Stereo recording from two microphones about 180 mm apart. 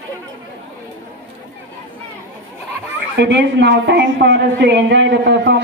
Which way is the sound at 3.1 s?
75° right (ahead or behind).